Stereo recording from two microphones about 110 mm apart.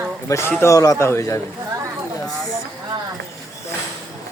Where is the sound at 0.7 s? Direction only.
30° left (ahead or behind).